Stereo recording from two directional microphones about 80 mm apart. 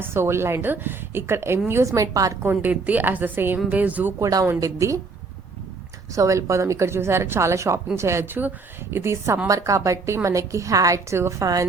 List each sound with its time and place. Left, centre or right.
0.0 s a woman's voice: right
1.8 s a woman's voice: right
2.4 s a woman's voice: right
4.2 s a woman's voice: right
6.1 s a woman's voice: right